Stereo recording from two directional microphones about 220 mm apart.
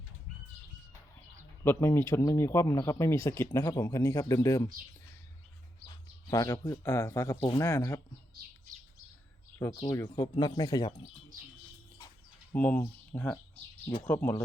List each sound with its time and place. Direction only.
1.6 s speech: 10° left (ahead or behind)
6.3 s speech: 15° left (ahead or behind)
8.7 s bird: 35° right (ahead or behind)
9.6 s speech: 15° left (ahead or behind)
12.5 s speech: 5° left (ahead or behind)